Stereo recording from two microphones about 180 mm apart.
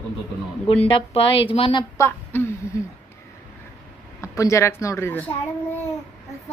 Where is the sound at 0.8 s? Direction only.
30° left (ahead or behind).